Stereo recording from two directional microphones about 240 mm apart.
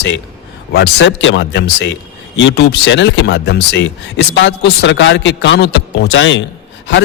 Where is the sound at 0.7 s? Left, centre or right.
Left.